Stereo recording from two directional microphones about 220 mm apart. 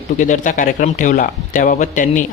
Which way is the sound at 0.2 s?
35° left (ahead or behind).